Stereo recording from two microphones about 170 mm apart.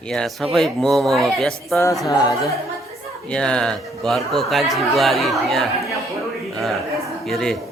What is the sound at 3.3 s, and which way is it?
Speech, 5° left (ahead or behind).